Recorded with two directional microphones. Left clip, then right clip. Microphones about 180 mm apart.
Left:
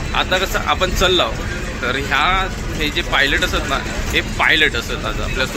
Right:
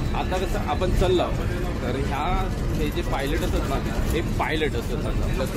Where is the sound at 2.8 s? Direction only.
Centre (ahead or behind).